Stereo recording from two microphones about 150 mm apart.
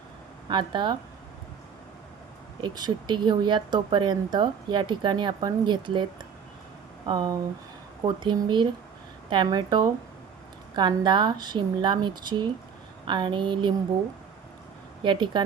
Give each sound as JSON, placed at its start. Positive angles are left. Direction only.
{"t": 0.4, "sound": "speech", "side_deg": -30}
{"t": 2.6, "sound": "speech", "side_deg": -30}
{"t": 15.0, "sound": "speech", "side_deg": -30}